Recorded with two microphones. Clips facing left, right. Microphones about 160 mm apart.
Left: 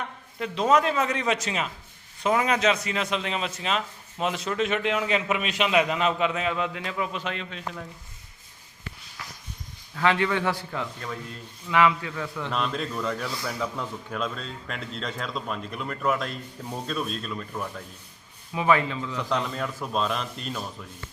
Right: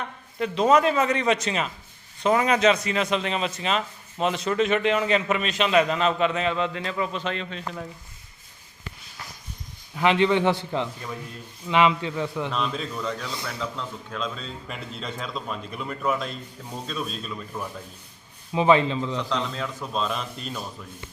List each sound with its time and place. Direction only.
0.3 s a man's voice: centre (ahead or behind)
9.9 s a man's voice: 20° right (ahead or behind)
12.5 s a man's voice: centre (ahead or behind)
18.5 s a man's voice: 25° right (ahead or behind)
19.3 s a man's voice: 10° left (ahead or behind)